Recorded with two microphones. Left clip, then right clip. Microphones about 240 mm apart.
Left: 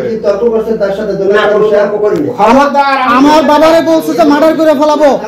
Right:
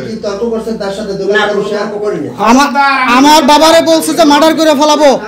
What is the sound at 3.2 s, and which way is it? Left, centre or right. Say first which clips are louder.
A man's voice: right 1 dB; right.